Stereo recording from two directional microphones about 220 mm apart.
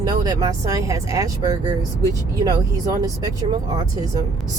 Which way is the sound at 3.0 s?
15° right (ahead or behind).